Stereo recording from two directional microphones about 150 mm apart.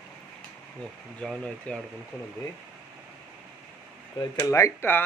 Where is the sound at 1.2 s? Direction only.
5° left (ahead or behind).